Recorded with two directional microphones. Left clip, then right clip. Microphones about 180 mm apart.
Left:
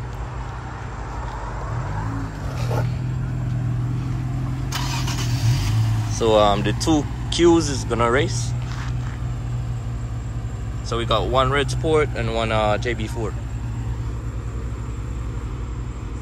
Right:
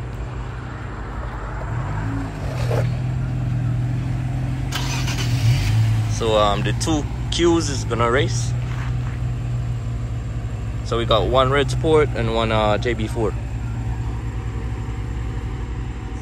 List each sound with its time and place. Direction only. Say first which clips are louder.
4.6 s vehicle: right 1 dB; 25° left (ahead or behind)
6.1 s speech: left 2 dB; 35° left (ahead or behind)
10.9 s speech: right 3 dB; 15° left (ahead or behind)